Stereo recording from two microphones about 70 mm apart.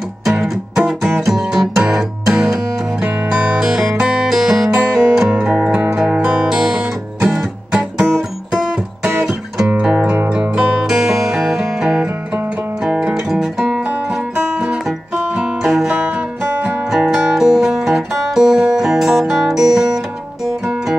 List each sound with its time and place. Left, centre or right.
0.2 s music: centre
6.5 s music: centre
13.1 s guitar: centre
13.7 s music: centre
16.9 s music: centre